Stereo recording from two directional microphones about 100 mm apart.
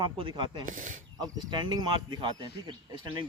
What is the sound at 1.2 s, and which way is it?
Speech, 50° right (ahead or behind).